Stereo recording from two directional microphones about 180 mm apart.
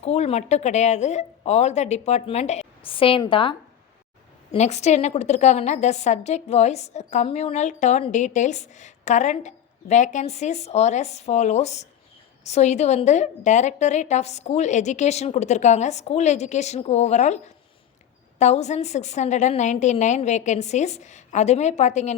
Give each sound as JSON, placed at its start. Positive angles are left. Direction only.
{"t": 0.0, "sound": "a woman's voice", "side_deg": 35}
{"t": 4.5, "sound": "a woman's voice", "side_deg": 40}